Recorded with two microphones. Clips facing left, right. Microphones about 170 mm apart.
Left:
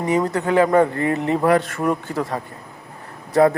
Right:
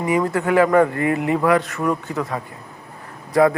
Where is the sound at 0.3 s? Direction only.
25° left (ahead or behind).